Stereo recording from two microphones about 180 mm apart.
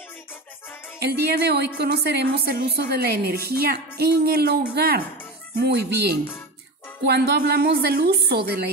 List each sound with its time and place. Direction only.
0.9 s a woman's voice: 60° right (ahead or behind)